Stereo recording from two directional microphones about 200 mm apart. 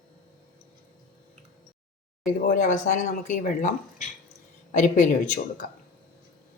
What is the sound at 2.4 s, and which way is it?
Speech, 40° left (ahead or behind).